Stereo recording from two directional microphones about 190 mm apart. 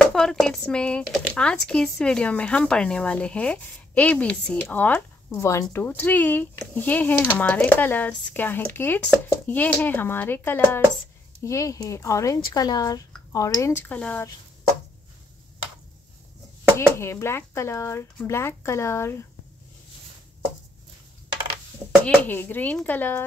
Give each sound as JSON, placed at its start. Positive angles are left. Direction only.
{"t": 0.0, "sound": "speech", "side_deg": 0}
{"t": 16.7, "sound": "speech", "side_deg": 15}
{"t": 22.0, "sound": "speech", "side_deg": 10}